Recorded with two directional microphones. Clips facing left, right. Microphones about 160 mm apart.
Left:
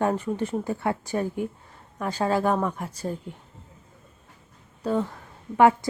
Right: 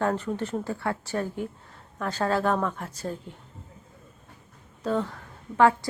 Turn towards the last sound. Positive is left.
turn(degrees=20)  # may be behind; listen again after turning